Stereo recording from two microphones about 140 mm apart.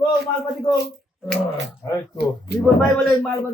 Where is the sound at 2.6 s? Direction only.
5° left (ahead or behind).